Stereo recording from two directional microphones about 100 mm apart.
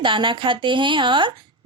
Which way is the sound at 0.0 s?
55° right (ahead or behind).